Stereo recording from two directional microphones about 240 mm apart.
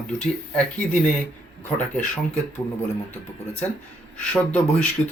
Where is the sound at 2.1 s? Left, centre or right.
Centre.